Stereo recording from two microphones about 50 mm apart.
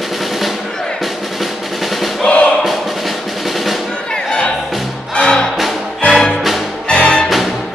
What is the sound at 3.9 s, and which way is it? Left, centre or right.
Music, centre.